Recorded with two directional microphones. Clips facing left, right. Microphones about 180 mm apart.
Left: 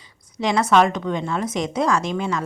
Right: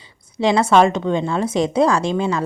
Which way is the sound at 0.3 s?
30° right (ahead or behind).